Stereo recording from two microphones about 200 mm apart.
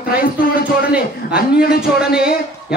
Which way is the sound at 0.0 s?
50° left (ahead or behind).